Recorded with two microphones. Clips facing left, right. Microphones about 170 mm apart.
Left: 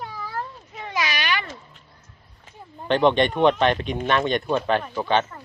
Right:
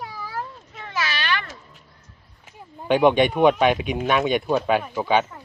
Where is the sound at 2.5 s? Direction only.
10° right (ahead or behind).